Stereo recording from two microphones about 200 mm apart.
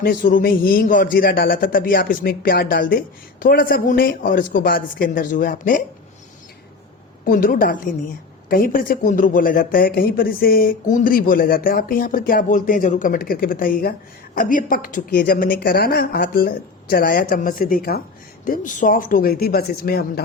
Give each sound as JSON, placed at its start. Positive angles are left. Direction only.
{"t": 0.0, "sound": "speech", "side_deg": 45}
{"t": 7.3, "sound": "speech", "side_deg": 45}